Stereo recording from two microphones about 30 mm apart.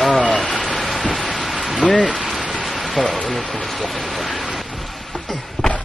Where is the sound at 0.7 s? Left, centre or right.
Centre.